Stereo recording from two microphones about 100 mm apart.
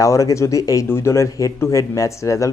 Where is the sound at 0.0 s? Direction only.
35° left (ahead or behind).